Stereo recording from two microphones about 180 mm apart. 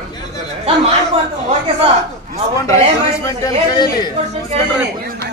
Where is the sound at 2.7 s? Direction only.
15° left (ahead or behind).